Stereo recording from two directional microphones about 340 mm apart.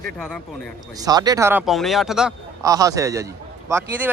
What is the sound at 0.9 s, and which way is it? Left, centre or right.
A man's voice, centre.